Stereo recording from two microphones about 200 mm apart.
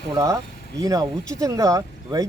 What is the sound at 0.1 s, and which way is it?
Speech, 15° right (ahead or behind).